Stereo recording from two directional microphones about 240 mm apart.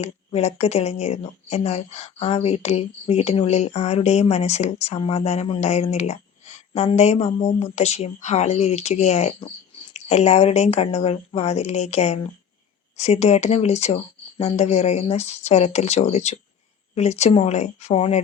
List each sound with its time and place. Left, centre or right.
0.0 s speech: left